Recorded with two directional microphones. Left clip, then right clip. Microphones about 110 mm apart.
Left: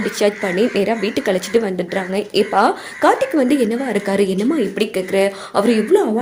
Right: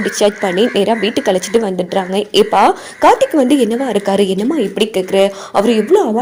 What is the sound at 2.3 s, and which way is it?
Speech, 70° right (ahead or behind).